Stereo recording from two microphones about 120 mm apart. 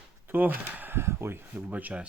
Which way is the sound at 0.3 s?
15° right (ahead or behind).